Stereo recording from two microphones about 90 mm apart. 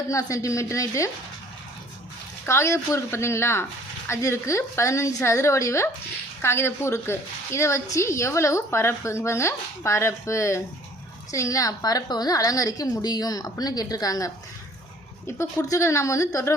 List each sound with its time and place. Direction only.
0.1 s a woman's voice: 35° left (ahead or behind)
2.5 s a woman's voice: 30° left (ahead or behind)
15.4 s a woman's voice: 35° left (ahead or behind)